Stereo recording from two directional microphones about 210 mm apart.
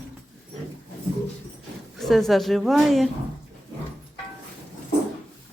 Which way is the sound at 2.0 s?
Centre (ahead or behind).